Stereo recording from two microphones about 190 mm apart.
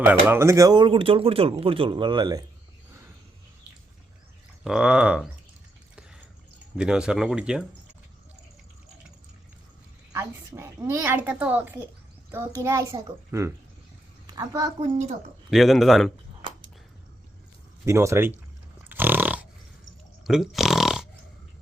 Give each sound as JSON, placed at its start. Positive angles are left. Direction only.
{"t": 0.0, "sound": "speech", "side_deg": -10}
{"t": 4.6, "sound": "speech", "side_deg": -5}
{"t": 6.7, "sound": "speech", "side_deg": -5}
{"t": 10.1, "sound": "a woman's voice", "side_deg": -15}
{"t": 15.4, "sound": "speech", "side_deg": 0}
{"t": 17.8, "sound": "a woman's voice", "side_deg": -15}
{"t": 18.9, "sound": "dog", "side_deg": -10}
{"t": 20.2, "sound": "speech", "side_deg": 0}